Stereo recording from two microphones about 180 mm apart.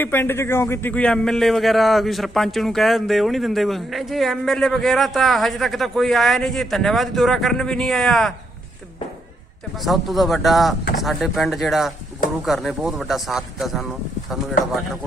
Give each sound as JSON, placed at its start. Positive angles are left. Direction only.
{"t": 0.0, "sound": "speech", "side_deg": 10}
{"t": 9.8, "sound": "speech", "side_deg": 0}